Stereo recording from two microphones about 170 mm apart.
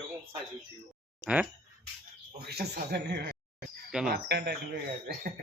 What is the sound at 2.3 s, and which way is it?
Speech, 70° right (ahead or behind).